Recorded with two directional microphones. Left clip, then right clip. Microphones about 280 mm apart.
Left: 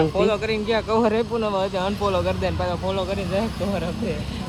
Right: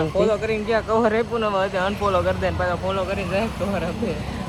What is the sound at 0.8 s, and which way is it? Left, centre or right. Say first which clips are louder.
Speech: right 1 dB; left.